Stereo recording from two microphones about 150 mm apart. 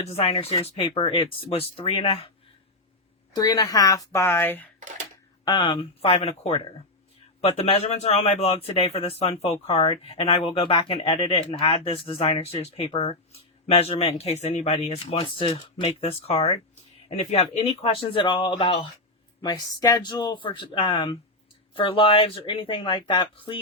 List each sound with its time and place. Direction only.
0.1 s a man's voice: 40° left (ahead or behind)
3.3 s a woman's voice: 25° left (ahead or behind)
5.5 s a man's voice: 30° left (ahead or behind)